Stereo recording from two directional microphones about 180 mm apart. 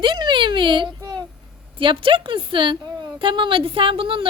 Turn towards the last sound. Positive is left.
turn(degrees=-30)  # may be behind; listen again after turning